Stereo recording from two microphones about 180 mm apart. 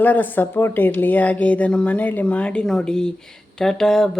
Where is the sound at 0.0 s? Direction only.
10° left (ahead or behind).